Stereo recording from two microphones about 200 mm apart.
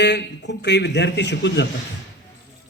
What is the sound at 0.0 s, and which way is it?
A man's voice, 60° left (ahead or behind).